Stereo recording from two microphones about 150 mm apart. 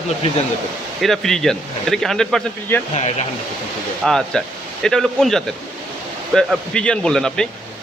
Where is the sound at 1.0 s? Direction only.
Centre (ahead or behind).